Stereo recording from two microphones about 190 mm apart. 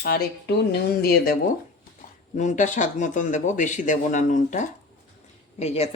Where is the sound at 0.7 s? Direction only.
55° left (ahead or behind).